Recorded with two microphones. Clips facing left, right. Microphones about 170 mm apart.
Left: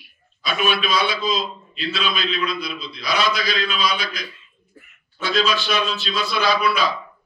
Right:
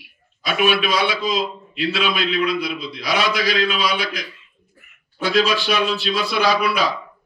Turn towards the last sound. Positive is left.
turn(degrees=-70)  # may be behind; listen again after turning